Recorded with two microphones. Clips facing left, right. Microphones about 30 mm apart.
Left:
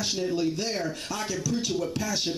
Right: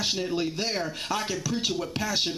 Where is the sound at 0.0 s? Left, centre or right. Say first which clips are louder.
Left 1 dB; right.